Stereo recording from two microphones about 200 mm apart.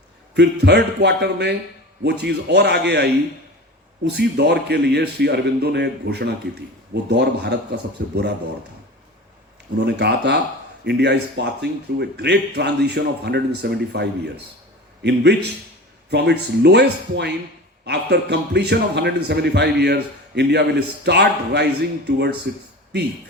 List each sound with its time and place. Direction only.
0.3 s a man's voice: 55° right (ahead or behind)
4.2 s a man's voice: 55° right (ahead or behind)
9.7 s a man's voice: 55° right (ahead or behind)